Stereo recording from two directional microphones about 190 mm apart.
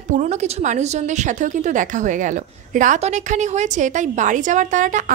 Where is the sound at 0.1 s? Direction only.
40° right (ahead or behind).